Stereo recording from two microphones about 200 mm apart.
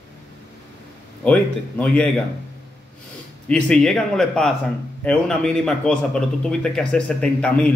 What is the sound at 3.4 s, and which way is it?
A man's voice, 5° left (ahead or behind).